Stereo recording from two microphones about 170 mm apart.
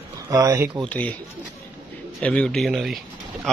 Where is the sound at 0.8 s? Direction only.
10° left (ahead or behind).